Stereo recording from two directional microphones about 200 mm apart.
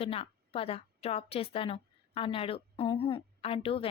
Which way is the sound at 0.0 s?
30° left (ahead or behind).